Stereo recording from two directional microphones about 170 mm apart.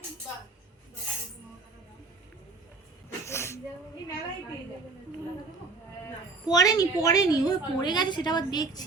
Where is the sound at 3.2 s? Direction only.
15° left (ahead or behind).